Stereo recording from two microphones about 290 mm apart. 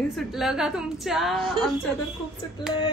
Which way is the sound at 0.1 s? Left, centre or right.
Centre.